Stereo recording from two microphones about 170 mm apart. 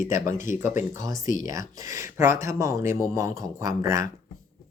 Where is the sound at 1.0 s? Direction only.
20° right (ahead or behind).